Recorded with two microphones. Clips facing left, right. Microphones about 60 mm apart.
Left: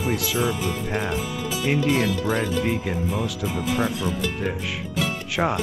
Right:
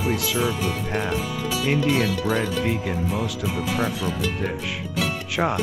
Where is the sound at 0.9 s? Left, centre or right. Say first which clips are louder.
Right 1 dB; centre.